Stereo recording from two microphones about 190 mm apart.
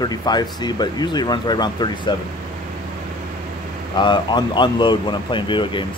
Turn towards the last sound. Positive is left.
turn(degrees=25)  # may be behind; listen again after turning